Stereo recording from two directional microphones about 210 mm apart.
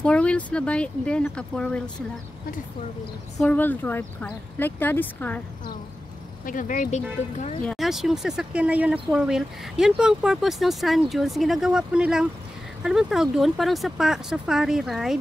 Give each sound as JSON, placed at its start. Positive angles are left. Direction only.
{"t": 0.0, "sound": "speech", "side_deg": 5}
{"t": 3.3, "sound": "speech", "side_deg": 10}
{"t": 6.4, "sound": "speech", "side_deg": 40}
{"t": 7.6, "sound": "speech", "side_deg": 0}